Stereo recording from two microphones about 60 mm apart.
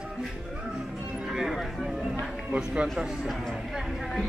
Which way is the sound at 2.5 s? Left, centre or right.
Centre.